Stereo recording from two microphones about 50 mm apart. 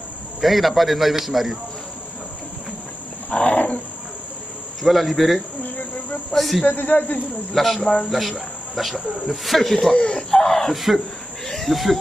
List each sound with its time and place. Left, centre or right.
0.4 s speech: centre
3.3 s wild animals: left
4.8 s speech: centre
5.6 s insect: left
6.3 s speech: centre
6.6 s speech: left
7.5 s speech: centre
9.9 s speech: centre
10.7 s speech: centre